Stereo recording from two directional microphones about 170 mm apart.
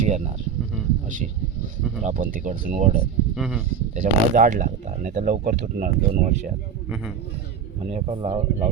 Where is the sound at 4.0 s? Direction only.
50° right (ahead or behind).